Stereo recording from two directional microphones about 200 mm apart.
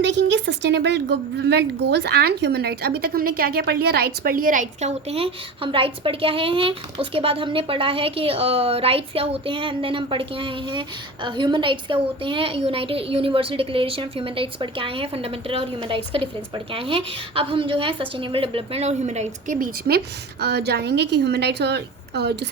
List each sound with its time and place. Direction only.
0.0 s a woman's voice: 65° right (ahead or behind); by 20.0 s 45° right (ahead or behind)
20.4 s a woman's voice: 55° right (ahead or behind)